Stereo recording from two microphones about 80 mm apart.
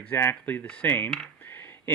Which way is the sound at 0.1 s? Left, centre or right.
Left.